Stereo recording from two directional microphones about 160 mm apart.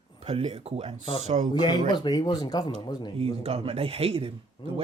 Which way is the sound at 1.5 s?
30° left (ahead or behind).